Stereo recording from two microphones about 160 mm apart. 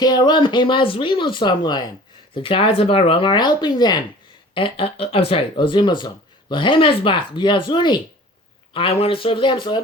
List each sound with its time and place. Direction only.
0.0 s speech: 25° left (ahead or behind)